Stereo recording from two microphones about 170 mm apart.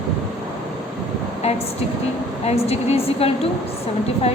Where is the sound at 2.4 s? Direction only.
35° left (ahead or behind).